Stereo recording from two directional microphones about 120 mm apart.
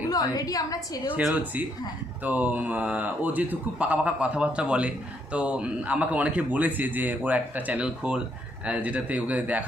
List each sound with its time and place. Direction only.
0.1 s a woman's voice: 30° left (ahead or behind)
1.2 s speech: 5° right (ahead or behind)